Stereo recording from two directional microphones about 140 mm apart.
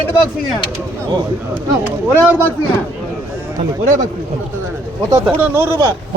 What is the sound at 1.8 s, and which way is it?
Speech, 15° right (ahead or behind).